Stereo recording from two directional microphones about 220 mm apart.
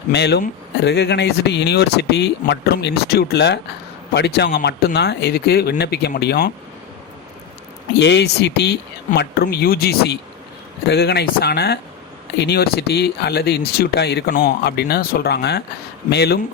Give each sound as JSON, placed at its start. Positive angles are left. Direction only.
{"t": 0.1, "sound": "speech", "side_deg": 50}
{"t": 7.9, "sound": "speech", "side_deg": 50}